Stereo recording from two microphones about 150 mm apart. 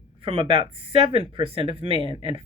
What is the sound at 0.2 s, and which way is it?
Speech, 35° right (ahead or behind).